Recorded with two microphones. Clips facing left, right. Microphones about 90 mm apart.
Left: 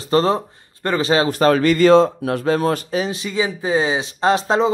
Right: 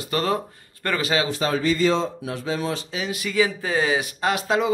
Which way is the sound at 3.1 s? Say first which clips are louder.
Left 1 dB; 25° left (ahead or behind).